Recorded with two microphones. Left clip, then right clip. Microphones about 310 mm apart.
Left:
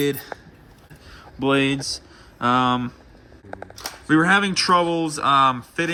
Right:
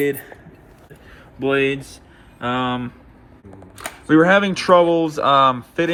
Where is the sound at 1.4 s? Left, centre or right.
Left.